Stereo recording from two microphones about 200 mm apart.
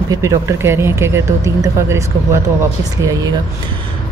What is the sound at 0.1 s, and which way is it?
Speech, 15° right (ahead or behind).